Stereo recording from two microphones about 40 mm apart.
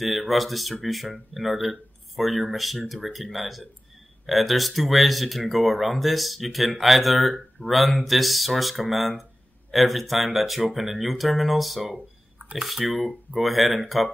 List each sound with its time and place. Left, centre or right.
0.0 s speech: centre
12.4 s a sound: right
12.6 s speech: centre